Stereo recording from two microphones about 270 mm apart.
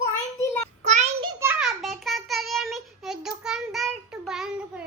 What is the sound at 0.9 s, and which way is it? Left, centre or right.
Child singing, right.